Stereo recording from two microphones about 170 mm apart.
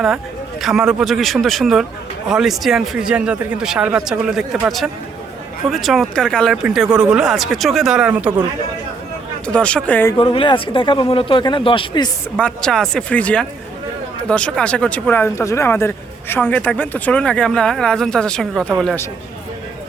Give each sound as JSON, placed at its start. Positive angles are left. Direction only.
{"t": 0.6, "sound": "a man's voice", "side_deg": -5}
{"t": 9.5, "sound": "speech", "side_deg": 5}
{"t": 10.2, "sound": "speech", "side_deg": 30}
{"t": 12.4, "sound": "a man's voice", "side_deg": 5}